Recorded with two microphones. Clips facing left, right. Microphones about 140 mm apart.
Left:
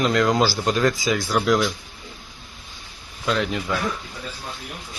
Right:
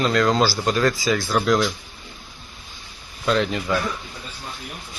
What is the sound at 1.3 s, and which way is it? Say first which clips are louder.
Speech: even; 5° left (ahead or behind).